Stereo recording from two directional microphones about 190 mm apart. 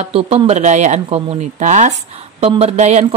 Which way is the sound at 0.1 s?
30° right (ahead or behind).